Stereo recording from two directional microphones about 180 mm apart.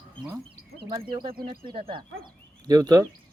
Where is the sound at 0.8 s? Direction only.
25° right (ahead or behind).